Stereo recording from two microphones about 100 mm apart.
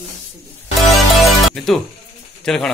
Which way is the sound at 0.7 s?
Centre (ahead or behind).